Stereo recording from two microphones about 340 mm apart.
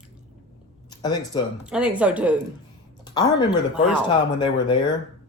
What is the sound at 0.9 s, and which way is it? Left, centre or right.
Speech, centre.